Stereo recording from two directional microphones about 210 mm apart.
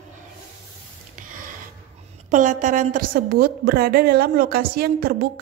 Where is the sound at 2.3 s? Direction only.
40° right (ahead or behind).